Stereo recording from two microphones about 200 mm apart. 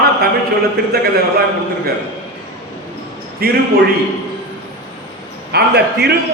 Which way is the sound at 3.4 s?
50° right (ahead or behind).